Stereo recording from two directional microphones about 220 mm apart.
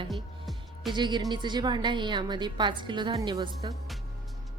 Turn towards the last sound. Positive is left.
turn(degrees=-20)  # may be behind; listen again after turning